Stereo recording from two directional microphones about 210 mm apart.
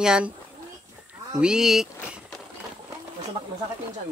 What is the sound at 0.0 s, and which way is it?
Speech, 5° right (ahead or behind).